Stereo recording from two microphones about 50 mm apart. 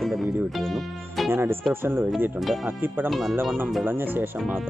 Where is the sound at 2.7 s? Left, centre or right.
Right.